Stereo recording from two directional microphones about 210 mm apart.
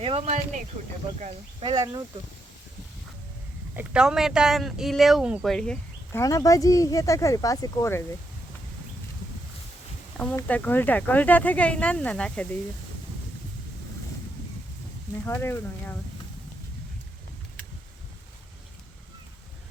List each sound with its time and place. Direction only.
0.0 s speech: 30° right (ahead or behind)
1.7 s speech: 15° right (ahead or behind)
3.8 s speech: 5° right (ahead or behind); by 8.0 s 15° left (ahead or behind)
10.2 s speech: 5° left (ahead or behind)
15.3 s speech: 10° left (ahead or behind)